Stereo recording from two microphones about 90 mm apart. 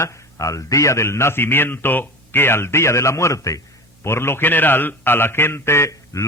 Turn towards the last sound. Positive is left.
turn(degrees=35)  # may be behind; listen again after turning